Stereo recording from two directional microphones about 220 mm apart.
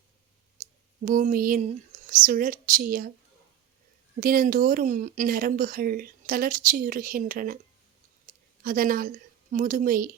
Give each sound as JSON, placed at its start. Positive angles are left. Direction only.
{"t": 0.6, "sound": "clicking", "side_deg": -40}
{"t": 1.0, "sound": "speech", "side_deg": -40}
{"t": 4.2, "sound": "speech", "side_deg": -40}
{"t": 8.6, "sound": "speech", "side_deg": -40}